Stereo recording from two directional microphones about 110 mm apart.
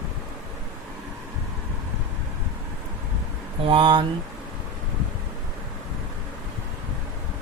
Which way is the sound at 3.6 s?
50° right (ahead or behind).